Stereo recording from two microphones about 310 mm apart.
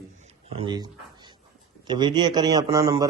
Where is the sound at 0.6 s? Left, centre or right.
Centre.